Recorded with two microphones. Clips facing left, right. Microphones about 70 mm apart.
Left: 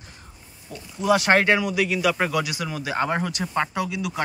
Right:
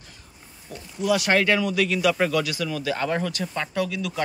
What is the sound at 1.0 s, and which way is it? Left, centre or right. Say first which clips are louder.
Speech: left 2 dB; left.